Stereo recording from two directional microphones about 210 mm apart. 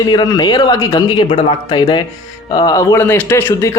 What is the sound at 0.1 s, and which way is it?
Speech, 20° left (ahead or behind).